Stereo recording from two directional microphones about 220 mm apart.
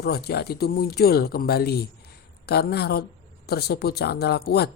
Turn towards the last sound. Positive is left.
turn(degrees=45)  # may be behind; listen again after turning